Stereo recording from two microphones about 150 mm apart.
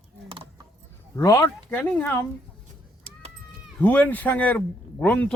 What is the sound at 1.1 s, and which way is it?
Speech, 20° left (ahead or behind).